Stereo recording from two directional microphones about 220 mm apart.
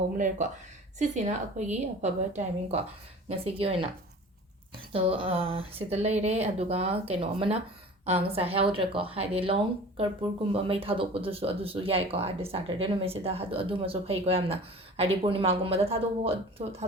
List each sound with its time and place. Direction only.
0.2 s a woman's voice: 35° right (ahead or behind)
4.9 s speech: 25° right (ahead or behind)